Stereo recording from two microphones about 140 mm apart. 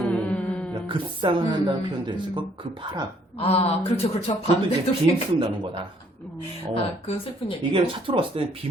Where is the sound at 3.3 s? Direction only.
45° left (ahead or behind).